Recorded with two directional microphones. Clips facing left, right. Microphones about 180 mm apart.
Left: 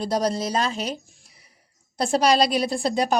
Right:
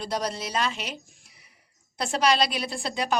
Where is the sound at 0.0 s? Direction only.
35° left (ahead or behind).